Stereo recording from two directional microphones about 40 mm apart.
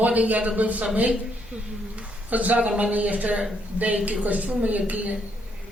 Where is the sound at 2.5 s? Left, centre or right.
Right.